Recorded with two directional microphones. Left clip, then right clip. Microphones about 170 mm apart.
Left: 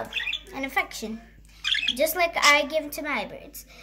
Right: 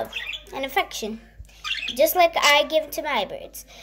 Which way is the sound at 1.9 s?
10° right (ahead or behind).